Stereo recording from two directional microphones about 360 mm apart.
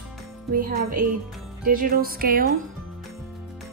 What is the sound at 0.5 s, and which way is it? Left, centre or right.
Speech, right.